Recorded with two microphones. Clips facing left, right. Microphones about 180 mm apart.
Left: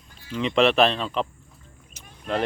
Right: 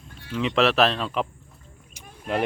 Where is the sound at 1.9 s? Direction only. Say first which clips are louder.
Even; 10° right (ahead or behind).